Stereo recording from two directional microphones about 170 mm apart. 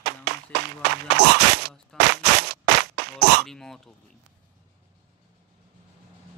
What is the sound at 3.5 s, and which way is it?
Throat clearing, centre (ahead or behind).